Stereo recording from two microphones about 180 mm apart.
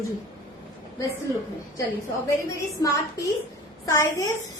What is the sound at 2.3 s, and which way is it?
A woman's voice, 15° left (ahead or behind).